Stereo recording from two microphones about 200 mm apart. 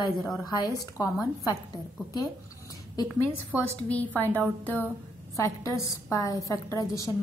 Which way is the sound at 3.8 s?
5° left (ahead or behind).